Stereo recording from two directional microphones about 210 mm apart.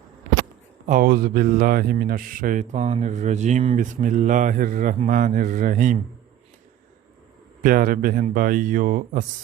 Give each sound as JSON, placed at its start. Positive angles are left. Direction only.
{"t": 0.9, "sound": "speech", "side_deg": -40}
{"t": 7.6, "sound": "speech", "side_deg": -40}